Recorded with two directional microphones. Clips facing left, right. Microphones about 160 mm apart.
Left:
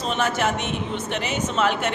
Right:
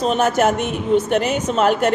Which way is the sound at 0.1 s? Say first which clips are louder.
Right 4 dB; 45° right (ahead or behind).